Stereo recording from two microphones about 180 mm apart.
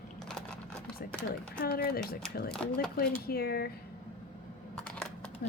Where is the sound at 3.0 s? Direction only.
60° left (ahead or behind).